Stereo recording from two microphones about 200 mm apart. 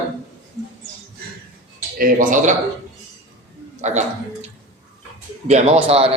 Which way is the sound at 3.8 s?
35° right (ahead or behind).